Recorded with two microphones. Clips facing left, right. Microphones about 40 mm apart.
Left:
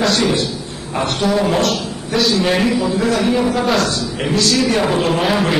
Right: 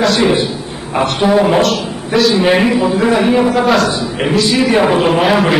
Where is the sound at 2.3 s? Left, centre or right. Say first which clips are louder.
Right 4 dB; right.